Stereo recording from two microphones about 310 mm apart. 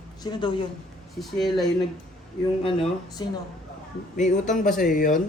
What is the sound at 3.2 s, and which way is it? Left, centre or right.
Speech, centre.